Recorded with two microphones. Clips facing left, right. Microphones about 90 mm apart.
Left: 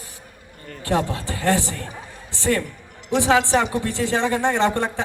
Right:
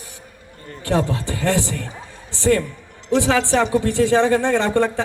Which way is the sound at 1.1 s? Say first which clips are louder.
Right 1 dB; 20° right (ahead or behind).